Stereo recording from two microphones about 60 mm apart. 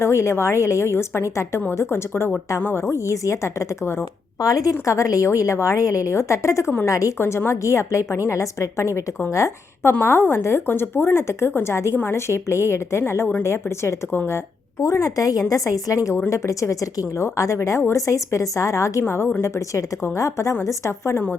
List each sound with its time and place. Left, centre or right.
0.0 s speech: left
2.9 s a woman's voice: left
4.4 s speech: left
4.7 s a woman's voice: left
7.6 s a woman's voice: left
9.9 s speech: left
14.8 s a woman's voice: left
19.0 s a woman's voice: left
19.4 s a woman's voice: left